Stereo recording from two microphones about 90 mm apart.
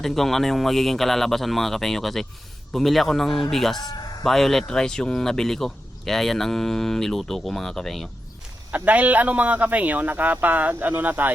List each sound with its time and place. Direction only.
0.0 s speech: 5° left (ahead or behind)
8.7 s speech: 20° right (ahead or behind)